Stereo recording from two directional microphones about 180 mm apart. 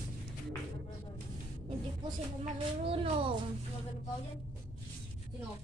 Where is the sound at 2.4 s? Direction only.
30° right (ahead or behind).